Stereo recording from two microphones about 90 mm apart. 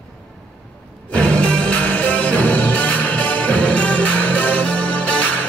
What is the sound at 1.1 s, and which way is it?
Music, 10° left (ahead or behind).